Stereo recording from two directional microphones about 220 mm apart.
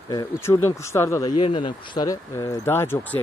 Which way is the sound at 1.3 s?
25° left (ahead or behind).